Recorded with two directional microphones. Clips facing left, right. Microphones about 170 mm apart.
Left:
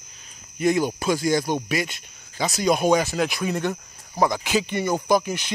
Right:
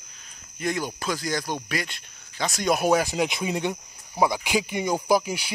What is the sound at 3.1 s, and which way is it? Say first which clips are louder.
Speech: left 1 dB; 20° right (ahead or behind).